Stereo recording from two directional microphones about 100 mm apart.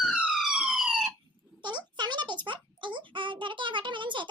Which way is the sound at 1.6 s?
50° right (ahead or behind).